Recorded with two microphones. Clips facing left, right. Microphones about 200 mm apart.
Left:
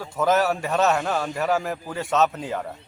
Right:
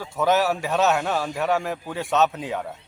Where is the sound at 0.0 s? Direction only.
Centre (ahead or behind).